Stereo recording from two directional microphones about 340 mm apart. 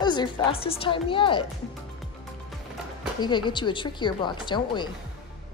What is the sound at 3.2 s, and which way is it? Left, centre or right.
A woman's voice, centre.